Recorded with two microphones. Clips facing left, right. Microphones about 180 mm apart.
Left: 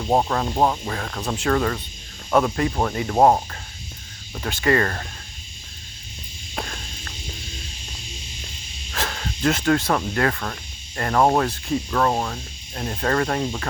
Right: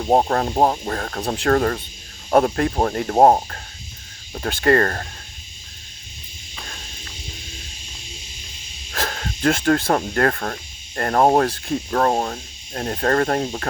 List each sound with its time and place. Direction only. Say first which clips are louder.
0.0 s speech: right 3 dB; 40° right (ahead or behind)
8.9 s snake: right 2 dB; 45° right (ahead or behind)
9.9 s speech: right 3 dB; 45° right (ahead or behind)